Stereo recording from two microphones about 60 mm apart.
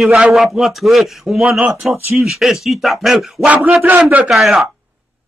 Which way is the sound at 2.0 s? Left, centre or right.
Right.